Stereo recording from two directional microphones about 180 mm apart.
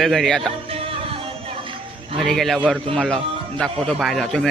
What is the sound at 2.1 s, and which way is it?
A man's voice, centre (ahead or behind).